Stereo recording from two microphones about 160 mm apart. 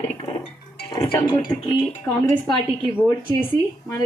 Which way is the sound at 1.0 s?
30° left (ahead or behind).